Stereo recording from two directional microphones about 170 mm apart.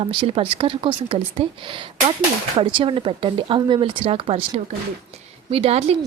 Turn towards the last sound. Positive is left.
turn(degrees=-35)  # may be behind; listen again after turning